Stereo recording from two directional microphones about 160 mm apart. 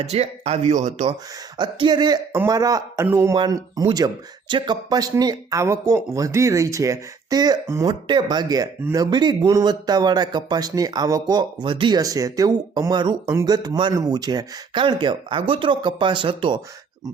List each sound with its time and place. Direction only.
0.0 s speech: 40° right (ahead or behind)
1.5 s speech: 30° right (ahead or behind)